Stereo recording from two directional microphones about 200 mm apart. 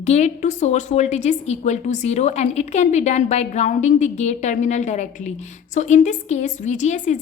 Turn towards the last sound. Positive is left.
turn(degrees=35)  # may be behind; listen again after turning